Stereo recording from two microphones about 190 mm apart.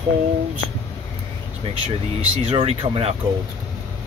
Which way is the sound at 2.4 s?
30° right (ahead or behind).